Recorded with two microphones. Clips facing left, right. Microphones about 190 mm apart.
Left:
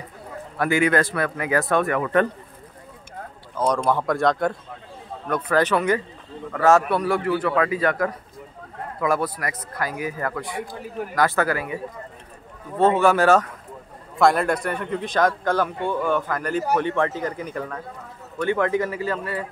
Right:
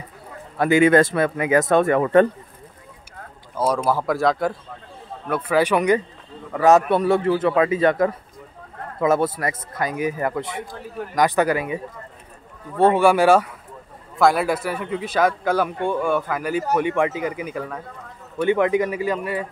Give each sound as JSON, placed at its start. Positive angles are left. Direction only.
{"t": 0.6, "sound": "speech", "side_deg": -20}
{"t": 3.5, "sound": "a man's voice", "side_deg": -5}
{"t": 18.4, "sound": "a man's voice", "side_deg": -15}